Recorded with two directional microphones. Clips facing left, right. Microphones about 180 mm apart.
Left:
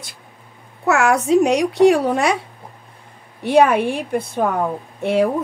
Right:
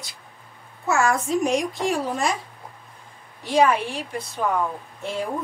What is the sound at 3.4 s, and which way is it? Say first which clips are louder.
A woman's voice: left 5 dB; 60° left (ahead or behind).